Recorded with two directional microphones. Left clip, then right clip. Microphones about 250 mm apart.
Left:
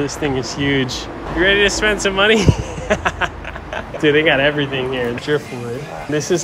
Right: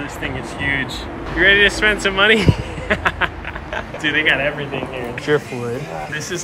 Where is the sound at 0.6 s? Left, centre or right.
Left.